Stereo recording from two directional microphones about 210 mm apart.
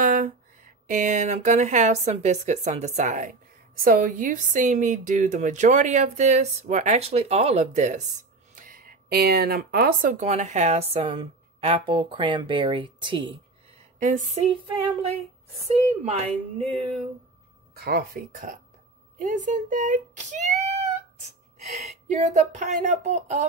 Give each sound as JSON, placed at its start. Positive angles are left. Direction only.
{"t": 0.0, "sound": "a sound", "side_deg": -40}
{"t": 0.8, "sound": "a woman's voice", "side_deg": -35}
{"t": 13.9, "sound": "speech", "side_deg": -35}
{"t": 15.7, "sound": "a woman's voice", "side_deg": -30}
{"t": 17.7, "sound": "a woman's voice", "side_deg": -45}
{"t": 22.0, "sound": "a woman's voice", "side_deg": -35}